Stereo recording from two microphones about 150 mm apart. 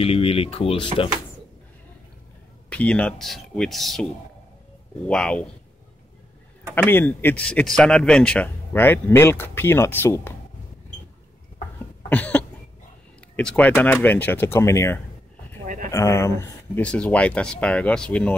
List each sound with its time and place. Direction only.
0.0 s speech: 40° left (ahead or behind)
2.7 s speech: 10° left (ahead or behind)
6.7 s speech: 15° left (ahead or behind)
12.1 s cough: 10° left (ahead or behind)
13.4 s speech: 10° left (ahead or behind)
15.6 s a sound: 60° right (ahead or behind)
15.9 s speech: 20° left (ahead or behind)
16.8 s speech: 10° left (ahead or behind)